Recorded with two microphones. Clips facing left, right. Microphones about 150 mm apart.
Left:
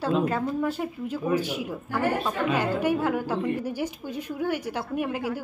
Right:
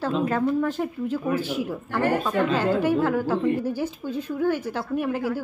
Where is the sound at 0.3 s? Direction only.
10° left (ahead or behind).